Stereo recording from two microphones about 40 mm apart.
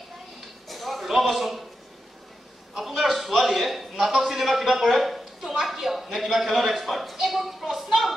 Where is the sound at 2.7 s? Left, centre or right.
Centre.